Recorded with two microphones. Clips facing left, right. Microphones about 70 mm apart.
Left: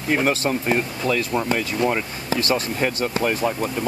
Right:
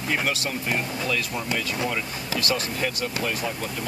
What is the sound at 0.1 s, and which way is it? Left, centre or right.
Speech, left.